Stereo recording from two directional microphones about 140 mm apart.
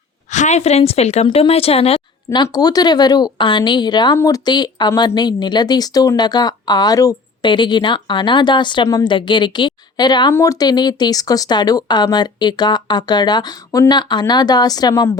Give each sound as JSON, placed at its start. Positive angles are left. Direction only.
{"t": 0.3, "sound": "speech", "side_deg": 55}
{"t": 2.3, "sound": "speech", "side_deg": 30}